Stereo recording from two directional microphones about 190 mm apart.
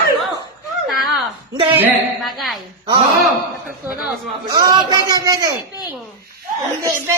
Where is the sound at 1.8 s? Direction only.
10° right (ahead or behind).